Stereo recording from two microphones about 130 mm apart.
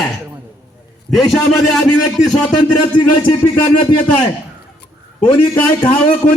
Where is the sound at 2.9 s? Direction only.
35° left (ahead or behind).